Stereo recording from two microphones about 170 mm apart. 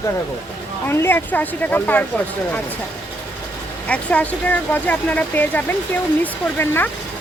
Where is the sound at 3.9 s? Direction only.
10° left (ahead or behind).